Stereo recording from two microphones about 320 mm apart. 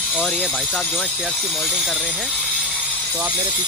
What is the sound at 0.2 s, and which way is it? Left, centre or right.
Speech, centre.